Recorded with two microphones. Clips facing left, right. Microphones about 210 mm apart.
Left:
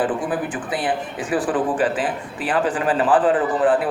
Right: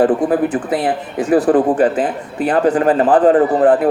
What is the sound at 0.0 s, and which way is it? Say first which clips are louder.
A man's voice: right 9 dB; 40° right (ahead or behind).